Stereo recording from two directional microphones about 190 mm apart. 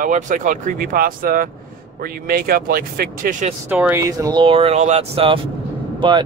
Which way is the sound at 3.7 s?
10° right (ahead or behind).